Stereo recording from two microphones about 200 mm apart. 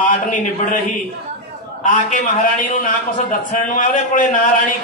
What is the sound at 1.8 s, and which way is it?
Speech, 40° left (ahead or behind).